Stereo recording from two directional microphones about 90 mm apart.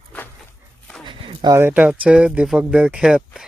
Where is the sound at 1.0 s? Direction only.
60° right (ahead or behind).